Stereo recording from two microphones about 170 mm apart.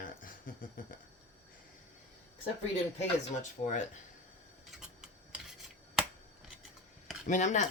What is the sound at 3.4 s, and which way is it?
Speech, 45° left (ahead or behind).